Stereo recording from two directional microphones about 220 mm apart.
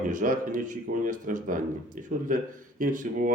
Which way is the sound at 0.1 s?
35° right (ahead or behind).